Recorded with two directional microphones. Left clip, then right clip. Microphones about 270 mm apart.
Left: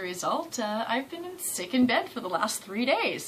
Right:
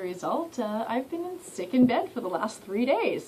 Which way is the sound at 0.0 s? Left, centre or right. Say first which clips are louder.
Even; centre.